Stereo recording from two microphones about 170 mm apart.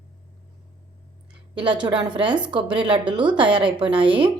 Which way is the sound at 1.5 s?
30° right (ahead or behind).